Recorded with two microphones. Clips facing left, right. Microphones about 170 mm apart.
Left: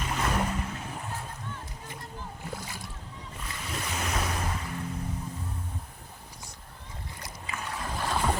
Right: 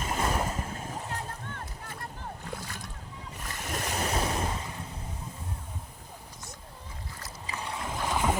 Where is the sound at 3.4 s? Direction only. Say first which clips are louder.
Right 2 dB; 45° right (ahead or behind); by 4.7 s 25° right (ahead or behind).